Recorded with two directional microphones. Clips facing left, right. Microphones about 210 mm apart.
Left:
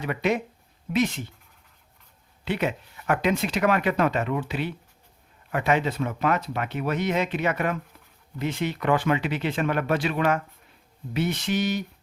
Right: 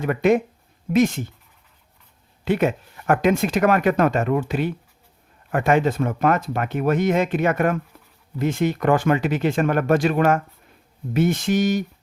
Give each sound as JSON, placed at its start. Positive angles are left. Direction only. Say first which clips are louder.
{"t": 0.0, "sound": "speech", "louder": "right 7 dB", "side_deg": -50}
{"t": 2.4, "sound": "speech", "louder": "right 6 dB", "side_deg": -50}